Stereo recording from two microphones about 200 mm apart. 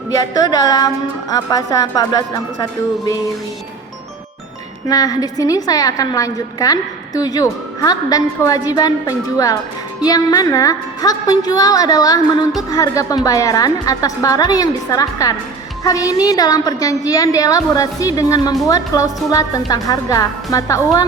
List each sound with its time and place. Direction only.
0.1 s a woman's voice: 20° left (ahead or behind)
4.9 s a woman's voice: 20° left (ahead or behind)